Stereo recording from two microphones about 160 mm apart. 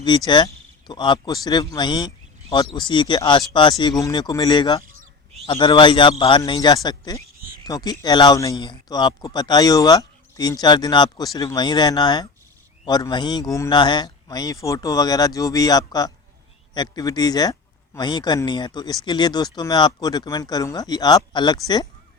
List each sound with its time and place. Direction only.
0.3 s a man's voice: 30° left (ahead or behind)